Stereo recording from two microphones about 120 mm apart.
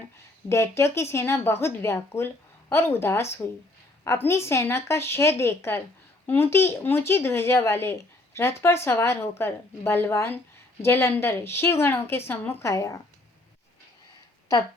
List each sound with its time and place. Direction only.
0.4 s speech: 20° left (ahead or behind)